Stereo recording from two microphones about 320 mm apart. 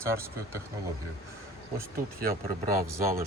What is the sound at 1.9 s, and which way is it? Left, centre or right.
Speech, right.